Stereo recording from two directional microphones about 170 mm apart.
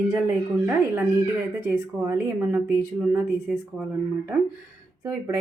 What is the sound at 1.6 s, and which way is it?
A woman's voice, 15° right (ahead or behind).